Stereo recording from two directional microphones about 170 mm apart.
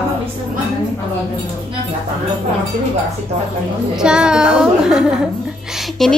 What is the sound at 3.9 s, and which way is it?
A woman's voice, 5° right (ahead or behind).